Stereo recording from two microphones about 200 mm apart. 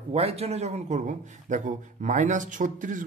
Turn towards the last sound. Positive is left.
turn(degrees=-40)  # may be behind; listen again after turning